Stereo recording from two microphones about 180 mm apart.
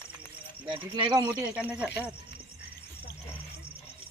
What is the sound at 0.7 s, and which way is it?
Speech, 25° right (ahead or behind).